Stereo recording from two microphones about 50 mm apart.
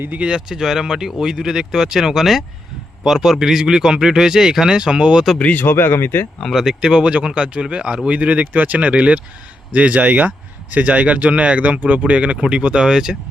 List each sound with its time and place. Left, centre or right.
0.3 s speech: centre
5.4 s speech: left
5.6 s speech: left
6.5 s speech: centre